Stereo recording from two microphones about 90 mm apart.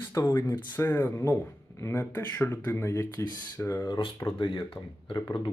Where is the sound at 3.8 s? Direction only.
65° left (ahead or behind).